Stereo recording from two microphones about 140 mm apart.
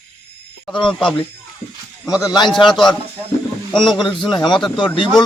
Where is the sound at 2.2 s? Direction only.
30° left (ahead or behind).